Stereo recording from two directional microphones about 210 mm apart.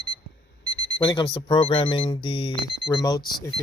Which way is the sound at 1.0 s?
25° left (ahead or behind).